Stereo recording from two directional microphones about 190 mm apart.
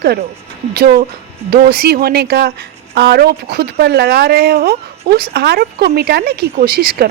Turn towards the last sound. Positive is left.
turn(degrees=-50)  # may be behind; listen again after turning